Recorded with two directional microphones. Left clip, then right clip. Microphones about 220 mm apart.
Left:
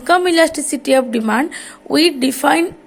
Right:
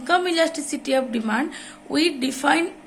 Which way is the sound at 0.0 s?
35° left (ahead or behind).